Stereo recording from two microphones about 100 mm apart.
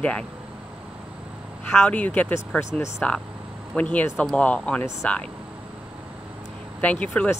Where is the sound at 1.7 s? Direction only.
15° left (ahead or behind).